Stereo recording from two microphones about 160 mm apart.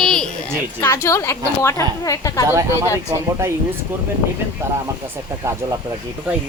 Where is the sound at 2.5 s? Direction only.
20° right (ahead or behind).